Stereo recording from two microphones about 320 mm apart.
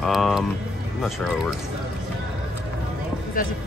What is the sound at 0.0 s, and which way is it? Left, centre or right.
Speech, centre.